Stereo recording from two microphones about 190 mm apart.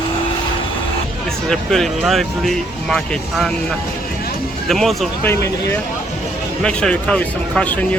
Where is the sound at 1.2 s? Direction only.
5° left (ahead or behind).